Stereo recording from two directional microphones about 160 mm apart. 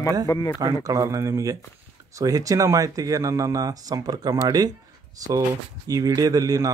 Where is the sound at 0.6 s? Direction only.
20° right (ahead or behind).